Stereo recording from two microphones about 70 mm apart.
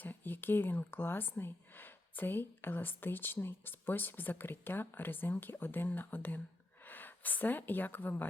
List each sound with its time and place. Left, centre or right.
0.0 s speech: left